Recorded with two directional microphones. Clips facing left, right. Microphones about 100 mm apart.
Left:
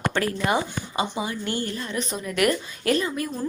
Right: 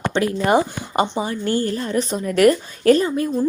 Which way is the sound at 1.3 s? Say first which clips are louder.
Right 7 dB; 40° right (ahead or behind).